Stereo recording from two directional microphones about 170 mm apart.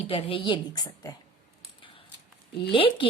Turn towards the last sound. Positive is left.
turn(degrees=30)  # may be behind; listen again after turning